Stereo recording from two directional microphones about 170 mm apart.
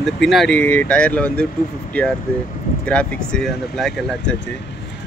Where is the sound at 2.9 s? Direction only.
5° left (ahead or behind).